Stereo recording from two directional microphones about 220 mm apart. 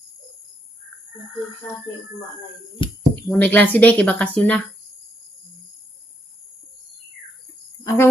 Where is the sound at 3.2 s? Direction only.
5° left (ahead or behind).